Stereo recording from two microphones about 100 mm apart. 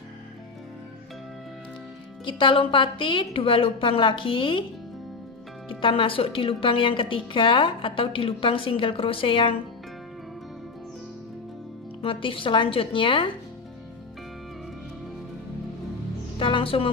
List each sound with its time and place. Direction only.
2.2 s speech: 55° left (ahead or behind)
5.7 s speech: 60° left (ahead or behind)
12.0 s speech: 60° left (ahead or behind)
16.3 s music: 60° left (ahead or behind)